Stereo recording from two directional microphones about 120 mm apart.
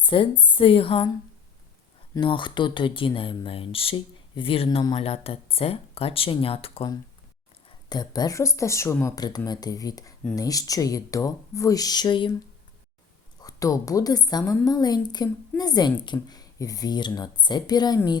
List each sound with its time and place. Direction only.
0.0 s speech: 45° left (ahead or behind)
2.2 s speech: 40° left (ahead or behind)
7.9 s a woman's voice: 35° left (ahead or behind)
13.4 s a woman's voice: 30° left (ahead or behind)